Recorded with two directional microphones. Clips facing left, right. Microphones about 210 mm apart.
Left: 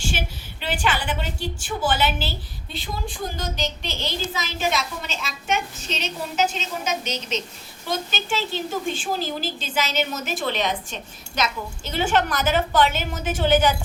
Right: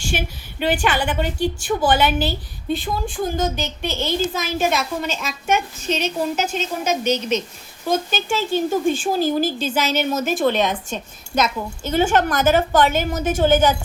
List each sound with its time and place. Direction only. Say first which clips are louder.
0.6 s a woman's voice: right 6 dB; 50° right (ahead or behind)
3.3 s a woman's voice: right 6 dB; 50° right (ahead or behind)